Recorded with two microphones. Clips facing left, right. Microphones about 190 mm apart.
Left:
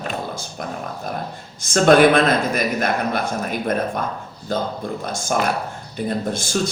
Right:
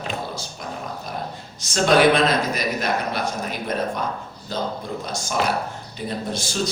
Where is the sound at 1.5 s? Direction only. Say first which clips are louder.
Left 4 dB; 50° left (ahead or behind).